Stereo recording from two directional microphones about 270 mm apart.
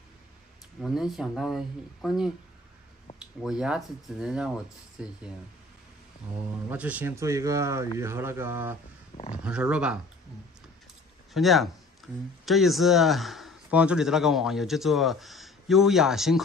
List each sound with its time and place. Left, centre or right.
0.7 s a man's voice: centre
3.4 s a man's voice: centre
6.7 s speech: centre
9.1 s speech: left
9.4 s a man's voice: centre
11.3 s a man's voice: centre
12.0 s a sound: centre
12.4 s a man's voice: centre